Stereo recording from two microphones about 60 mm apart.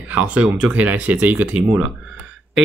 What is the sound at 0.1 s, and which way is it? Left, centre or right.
Speech, right.